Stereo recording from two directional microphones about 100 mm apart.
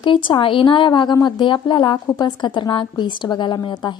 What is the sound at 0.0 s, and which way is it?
A woman's voice, 55° left (ahead or behind).